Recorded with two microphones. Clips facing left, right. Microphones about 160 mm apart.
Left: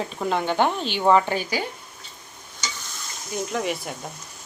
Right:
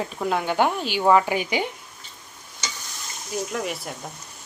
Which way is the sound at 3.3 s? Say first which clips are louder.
Left 2 dB; centre (ahead or behind).